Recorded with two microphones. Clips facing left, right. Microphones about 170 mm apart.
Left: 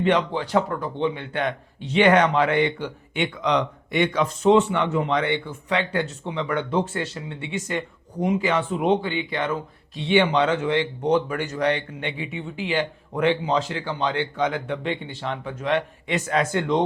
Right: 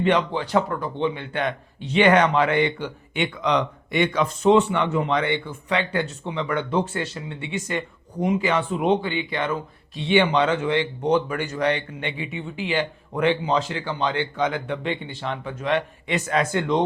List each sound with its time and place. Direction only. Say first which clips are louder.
0.0 s speech: even; 40° left (ahead or behind)